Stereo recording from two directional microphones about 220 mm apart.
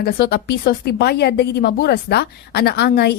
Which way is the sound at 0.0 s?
45° left (ahead or behind).